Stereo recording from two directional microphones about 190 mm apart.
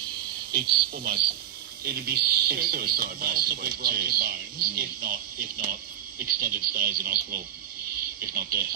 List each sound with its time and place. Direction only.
0.5 s speech: 55° right (ahead or behind)